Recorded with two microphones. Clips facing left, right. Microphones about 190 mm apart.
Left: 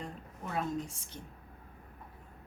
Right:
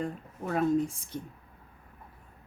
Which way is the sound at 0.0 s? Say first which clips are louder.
Right 8 dB; 50° right (ahead or behind).